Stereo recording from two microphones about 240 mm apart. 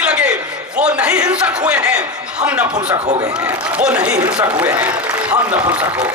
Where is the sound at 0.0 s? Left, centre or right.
Centre.